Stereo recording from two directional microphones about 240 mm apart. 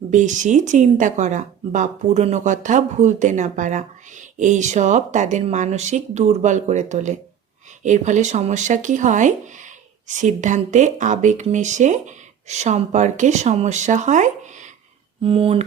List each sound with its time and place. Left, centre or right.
0.1 s speech: right